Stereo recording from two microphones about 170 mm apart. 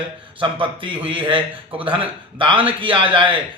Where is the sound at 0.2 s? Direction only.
30° right (ahead or behind).